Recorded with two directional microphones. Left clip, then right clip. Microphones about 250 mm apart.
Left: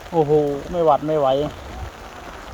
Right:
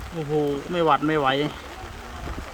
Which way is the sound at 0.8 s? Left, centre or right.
Right.